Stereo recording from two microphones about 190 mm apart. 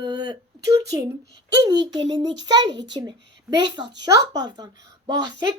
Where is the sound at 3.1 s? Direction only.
65° right (ahead or behind).